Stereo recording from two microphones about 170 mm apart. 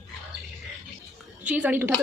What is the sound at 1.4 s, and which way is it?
Speech, 10° right (ahead or behind).